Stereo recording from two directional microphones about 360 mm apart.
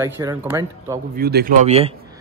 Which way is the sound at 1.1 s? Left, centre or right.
Right.